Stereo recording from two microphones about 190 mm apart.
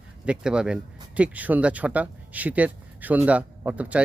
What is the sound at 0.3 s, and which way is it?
Speech, 5° right (ahead or behind).